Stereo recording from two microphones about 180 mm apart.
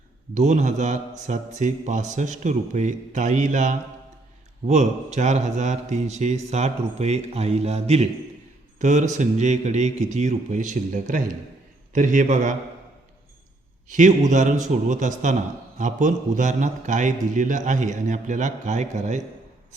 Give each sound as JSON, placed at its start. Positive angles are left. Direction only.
{"t": 0.3, "sound": "a man's voice", "side_deg": -40}
{"t": 13.8, "sound": "a man's voice", "side_deg": -45}